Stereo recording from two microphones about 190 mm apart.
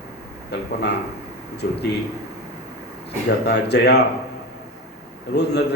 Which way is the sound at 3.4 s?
60° left (ahead or behind).